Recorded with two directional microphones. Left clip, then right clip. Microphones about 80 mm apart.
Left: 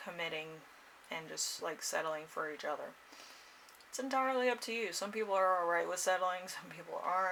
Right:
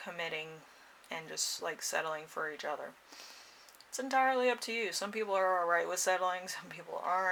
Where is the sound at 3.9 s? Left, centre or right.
Right.